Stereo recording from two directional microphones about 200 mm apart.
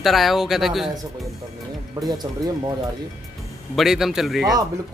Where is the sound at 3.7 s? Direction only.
Centre (ahead or behind).